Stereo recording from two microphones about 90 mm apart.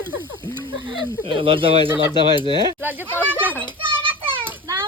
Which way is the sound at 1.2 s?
90° right.